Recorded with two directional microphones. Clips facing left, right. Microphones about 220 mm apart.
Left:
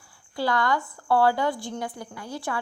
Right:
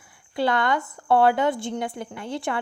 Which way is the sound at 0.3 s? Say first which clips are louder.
Right 2 dB; 20° right (ahead or behind).